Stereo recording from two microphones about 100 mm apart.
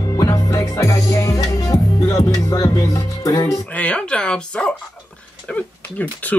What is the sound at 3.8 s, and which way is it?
Speech, 10° left (ahead or behind).